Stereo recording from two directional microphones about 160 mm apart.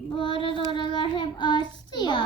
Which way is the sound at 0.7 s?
30° left (ahead or behind).